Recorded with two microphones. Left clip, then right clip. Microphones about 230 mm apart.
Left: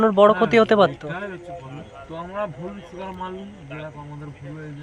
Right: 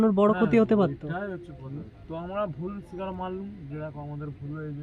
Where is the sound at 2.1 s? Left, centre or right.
Centre.